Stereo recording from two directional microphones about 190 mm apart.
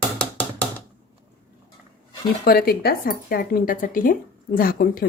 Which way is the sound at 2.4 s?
55° left (ahead or behind).